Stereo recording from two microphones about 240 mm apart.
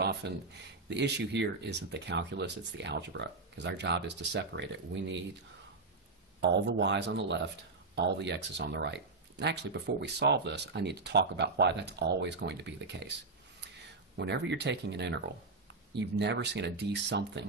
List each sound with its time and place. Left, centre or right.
0.0 s a sound: right
0.8 s speech: right
6.4 s speech: right
14.1 s speech: right